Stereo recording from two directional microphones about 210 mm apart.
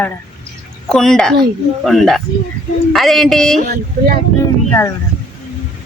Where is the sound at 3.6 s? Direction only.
45° right (ahead or behind).